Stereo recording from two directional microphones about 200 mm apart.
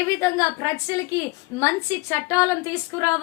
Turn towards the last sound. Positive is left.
turn(degrees=15)  # may be behind; listen again after turning